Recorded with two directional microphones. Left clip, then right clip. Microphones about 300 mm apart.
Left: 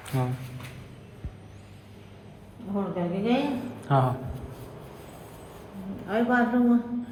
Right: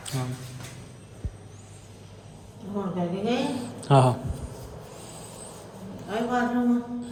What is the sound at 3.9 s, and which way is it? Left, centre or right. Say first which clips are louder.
Speech: right 4 dB; centre.